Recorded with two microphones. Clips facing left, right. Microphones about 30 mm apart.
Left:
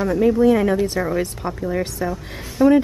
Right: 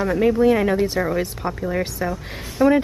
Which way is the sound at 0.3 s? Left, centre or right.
Centre.